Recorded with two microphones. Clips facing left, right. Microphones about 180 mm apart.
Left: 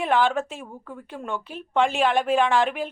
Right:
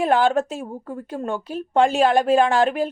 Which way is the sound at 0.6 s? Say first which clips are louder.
Right 7 dB; 30° right (ahead or behind).